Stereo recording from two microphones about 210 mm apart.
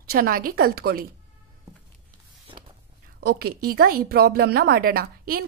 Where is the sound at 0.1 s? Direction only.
45° right (ahead or behind).